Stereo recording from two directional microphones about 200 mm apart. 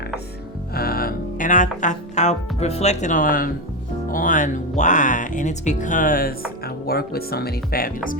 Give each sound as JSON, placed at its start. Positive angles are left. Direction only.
{"t": 0.7, "sound": "speech", "side_deg": 50}